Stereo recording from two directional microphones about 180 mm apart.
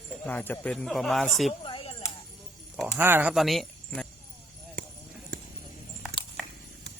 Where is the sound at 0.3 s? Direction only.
10° left (ahead or behind).